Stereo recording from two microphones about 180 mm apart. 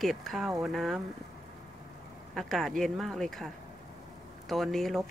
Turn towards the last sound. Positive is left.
turn(degrees=0)  # may be behind; listen again after turning